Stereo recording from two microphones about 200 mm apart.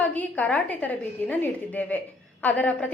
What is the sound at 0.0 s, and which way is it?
A woman's voice, 10° left (ahead or behind).